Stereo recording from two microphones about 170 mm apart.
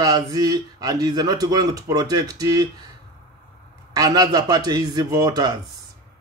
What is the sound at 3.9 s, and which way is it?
Speech, 20° right (ahead or behind).